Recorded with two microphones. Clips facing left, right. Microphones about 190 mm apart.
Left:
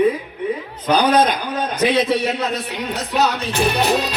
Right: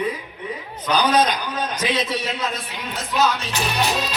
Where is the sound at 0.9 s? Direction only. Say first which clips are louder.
Left 3 dB; 55° left (ahead or behind).